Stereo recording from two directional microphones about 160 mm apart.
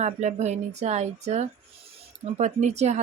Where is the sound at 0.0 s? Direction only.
45° right (ahead or behind).